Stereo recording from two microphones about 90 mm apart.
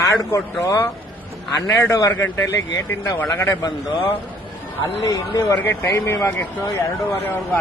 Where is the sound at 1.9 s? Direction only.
35° left (ahead or behind).